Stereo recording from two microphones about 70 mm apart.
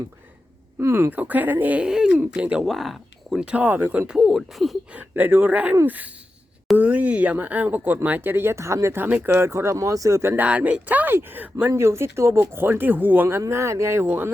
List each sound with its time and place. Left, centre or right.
0.8 s speech: right
1.1 s speech: right
1.9 s a sound: centre
2.3 s speech: centre
2.6 s speech: centre
4.2 s speech: centre
4.9 s speech: right
9.0 s speech: right
10.3 s speech: right
13.5 s speech: right